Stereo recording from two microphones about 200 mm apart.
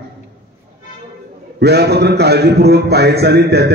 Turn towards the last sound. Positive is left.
turn(degrees=-55)  # may be behind; listen again after turning